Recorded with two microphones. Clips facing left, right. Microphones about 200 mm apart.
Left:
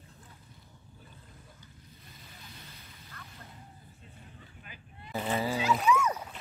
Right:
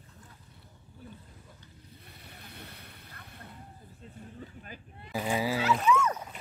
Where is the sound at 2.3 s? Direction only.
60° right (ahead or behind).